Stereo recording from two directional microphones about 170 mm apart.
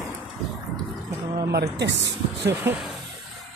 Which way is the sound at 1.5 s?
90° right.